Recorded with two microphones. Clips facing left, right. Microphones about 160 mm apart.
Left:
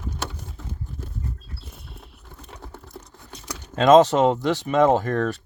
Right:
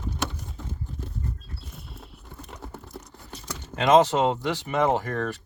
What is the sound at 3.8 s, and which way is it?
Speech, 45° left (ahead or behind).